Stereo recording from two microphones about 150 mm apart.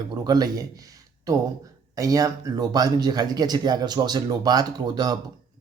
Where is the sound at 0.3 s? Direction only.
25° right (ahead or behind).